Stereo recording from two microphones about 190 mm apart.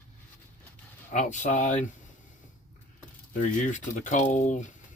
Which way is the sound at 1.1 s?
40° left (ahead or behind).